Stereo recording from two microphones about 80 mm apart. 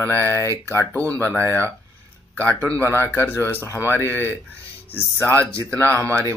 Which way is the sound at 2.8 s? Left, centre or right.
Left.